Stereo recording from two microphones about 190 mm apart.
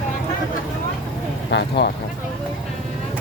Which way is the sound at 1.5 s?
65° left (ahead or behind).